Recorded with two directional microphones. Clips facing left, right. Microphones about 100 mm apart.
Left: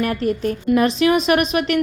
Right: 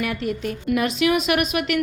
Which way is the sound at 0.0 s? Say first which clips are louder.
Left 5 dB; 40° left (ahead or behind).